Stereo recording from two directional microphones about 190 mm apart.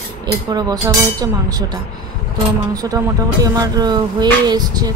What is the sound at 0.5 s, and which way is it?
Speech, 20° right (ahead or behind).